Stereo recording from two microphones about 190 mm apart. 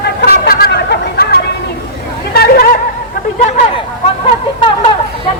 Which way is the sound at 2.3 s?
55° left (ahead or behind).